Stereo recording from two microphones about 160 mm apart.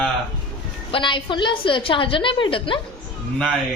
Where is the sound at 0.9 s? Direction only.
30° left (ahead or behind).